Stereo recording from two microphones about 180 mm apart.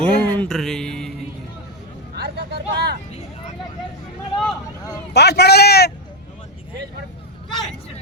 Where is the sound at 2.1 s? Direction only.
65° right (ahead or behind).